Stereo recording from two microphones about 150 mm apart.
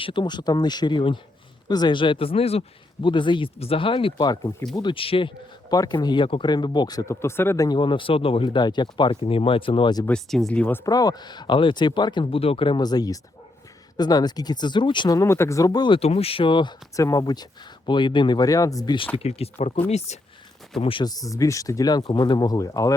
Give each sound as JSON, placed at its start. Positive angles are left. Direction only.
{"t": 0.0, "sound": "speech", "side_deg": 35}
{"t": 7.8, "sound": "speech", "side_deg": 35}
{"t": 10.1, "sound": "speech", "side_deg": 0}
{"t": 10.8, "sound": "speech", "side_deg": 25}
{"t": 16.0, "sound": "speech", "side_deg": 40}
{"t": 19.1, "sound": "speech", "side_deg": 40}
{"t": 20.8, "sound": "speech", "side_deg": 30}